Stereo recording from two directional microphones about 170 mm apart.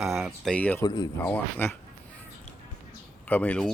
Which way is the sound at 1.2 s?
10° left (ahead or behind).